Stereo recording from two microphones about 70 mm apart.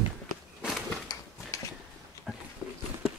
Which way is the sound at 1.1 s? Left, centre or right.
Left.